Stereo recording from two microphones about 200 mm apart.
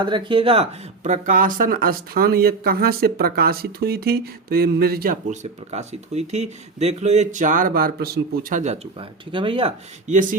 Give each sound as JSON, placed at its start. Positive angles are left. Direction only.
{"t": 0.0, "sound": "speech", "side_deg": -25}